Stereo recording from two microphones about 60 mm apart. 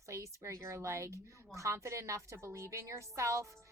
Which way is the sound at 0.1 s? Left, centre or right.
Right.